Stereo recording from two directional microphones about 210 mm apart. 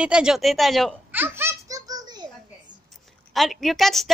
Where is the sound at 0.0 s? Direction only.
5° right (ahead or behind).